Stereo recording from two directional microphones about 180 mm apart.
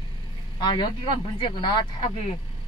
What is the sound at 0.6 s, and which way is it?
Speech, 25° left (ahead or behind).